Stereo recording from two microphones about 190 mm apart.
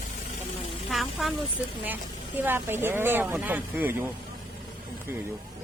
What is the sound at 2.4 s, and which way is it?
Speech, 10° right (ahead or behind).